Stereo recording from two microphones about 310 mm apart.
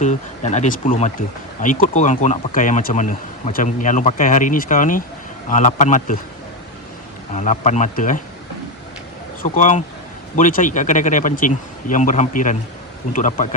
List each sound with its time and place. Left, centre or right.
0.0 s speech: left
7.3 s speech: left
9.4 s speech: left